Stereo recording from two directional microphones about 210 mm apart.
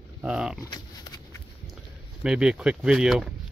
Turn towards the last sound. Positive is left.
turn(degrees=0)  # may be behind; listen again after turning